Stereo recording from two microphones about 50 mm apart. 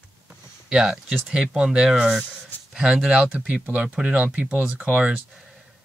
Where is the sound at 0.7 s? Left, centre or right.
Centre.